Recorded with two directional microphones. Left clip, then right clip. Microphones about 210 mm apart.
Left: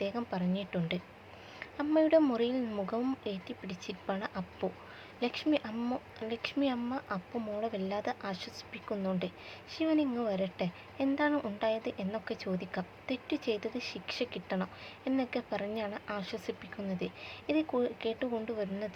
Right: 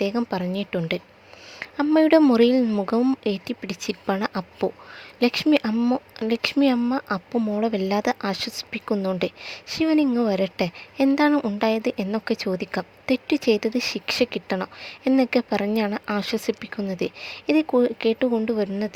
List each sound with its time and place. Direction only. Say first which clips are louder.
0.0 s speech: right 11 dB; 50° right (ahead or behind)